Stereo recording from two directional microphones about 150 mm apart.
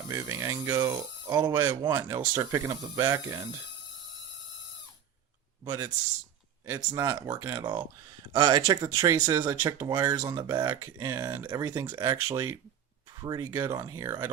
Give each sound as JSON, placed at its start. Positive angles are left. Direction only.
{"t": 0.1, "sound": "speech", "side_deg": -20}
{"t": 5.6, "sound": "speech", "side_deg": -25}